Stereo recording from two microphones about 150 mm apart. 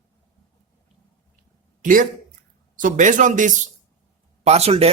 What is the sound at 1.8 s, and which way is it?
Speech, 60° right (ahead or behind).